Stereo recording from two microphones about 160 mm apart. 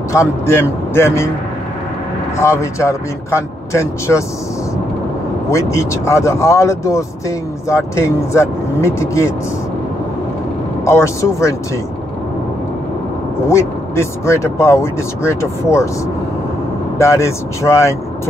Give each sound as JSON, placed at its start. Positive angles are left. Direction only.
{"t": 0.1, "sound": "speech", "side_deg": 15}
{"t": 2.3, "sound": "speech", "side_deg": 15}
{"t": 5.5, "sound": "speech", "side_deg": 20}
{"t": 10.9, "sound": "speech", "side_deg": 15}
{"t": 13.5, "sound": "speech", "side_deg": 15}
{"t": 17.0, "sound": "speech", "side_deg": 20}